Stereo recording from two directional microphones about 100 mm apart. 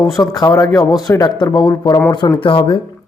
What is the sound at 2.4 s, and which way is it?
Speech, 60° left (ahead or behind).